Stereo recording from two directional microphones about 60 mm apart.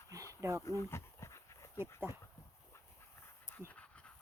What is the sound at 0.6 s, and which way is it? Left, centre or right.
Dog, left.